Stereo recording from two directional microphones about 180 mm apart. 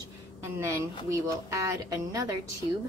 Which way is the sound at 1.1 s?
15° right (ahead or behind).